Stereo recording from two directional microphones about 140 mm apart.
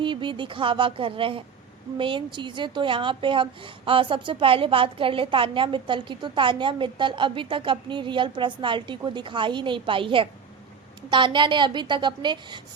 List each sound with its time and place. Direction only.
0.0 s a woman's voice: 35° right (ahead or behind)